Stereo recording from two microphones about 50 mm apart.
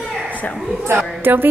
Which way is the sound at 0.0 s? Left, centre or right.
Centre.